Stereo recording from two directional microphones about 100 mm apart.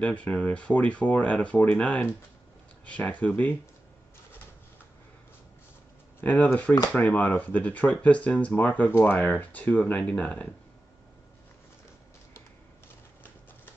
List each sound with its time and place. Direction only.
0.0 s speech: 15° left (ahead or behind)
6.2 s speech: 15° left (ahead or behind)